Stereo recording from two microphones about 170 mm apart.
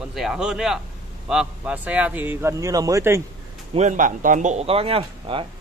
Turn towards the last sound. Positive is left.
turn(degrees=-30)  # may be behind; listen again after turning